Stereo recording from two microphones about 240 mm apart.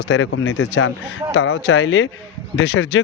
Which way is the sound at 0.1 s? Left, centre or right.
Left.